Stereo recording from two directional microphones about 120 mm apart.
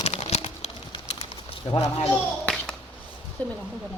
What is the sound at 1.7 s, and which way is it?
Speech, 55° left (ahead or behind).